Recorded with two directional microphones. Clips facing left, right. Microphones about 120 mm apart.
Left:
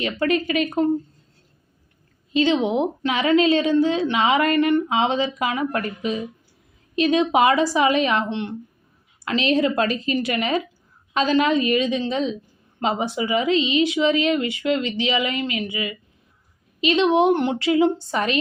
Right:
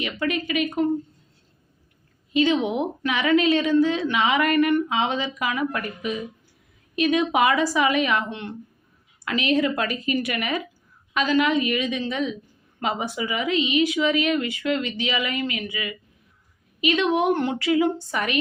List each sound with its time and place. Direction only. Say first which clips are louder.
0.0 s speech: left 4 dB; 35° left (ahead or behind)
2.3 s a woman's voice: left 2 dB; 30° left (ahead or behind)